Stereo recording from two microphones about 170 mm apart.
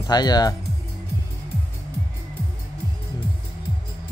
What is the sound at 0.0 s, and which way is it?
Speech, 25° left (ahead or behind).